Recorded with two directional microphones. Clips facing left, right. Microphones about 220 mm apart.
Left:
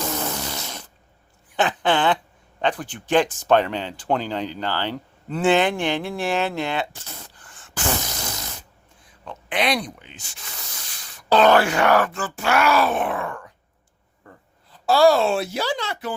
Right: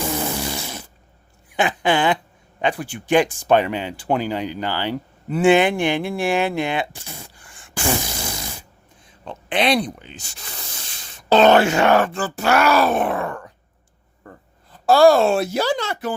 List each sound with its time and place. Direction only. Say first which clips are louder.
0.0 s fart: right 3 dB; 10° right (ahead or behind)
1.5 s a sound: right 1 dB; 10° right (ahead or behind)
2.6 s speech: right 1 dB; 10° right (ahead or behind)
9.0 s speech: right 3 dB; 30° right (ahead or behind)
14.7 s a woman's voice: right 3 dB; 50° right (ahead or behind)